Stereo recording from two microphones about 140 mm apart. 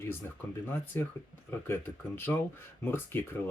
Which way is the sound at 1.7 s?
15° left (ahead or behind).